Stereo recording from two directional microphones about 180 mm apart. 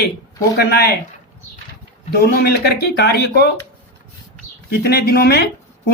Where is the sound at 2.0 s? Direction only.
60° left (ahead or behind).